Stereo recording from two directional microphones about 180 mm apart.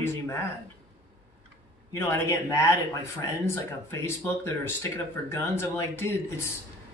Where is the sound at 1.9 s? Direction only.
15° left (ahead or behind).